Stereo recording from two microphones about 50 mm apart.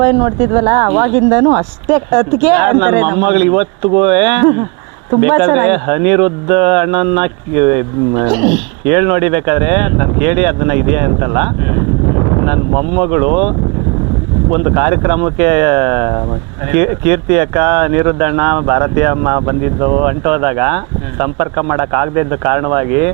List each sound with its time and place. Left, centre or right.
0.0 s speech: centre
12.0 s a sound: centre
12.5 s speech: centre
14.8 s speech: centre
20.1 s speech: centre